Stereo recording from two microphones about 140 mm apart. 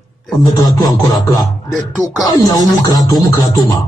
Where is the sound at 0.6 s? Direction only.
25° left (ahead or behind).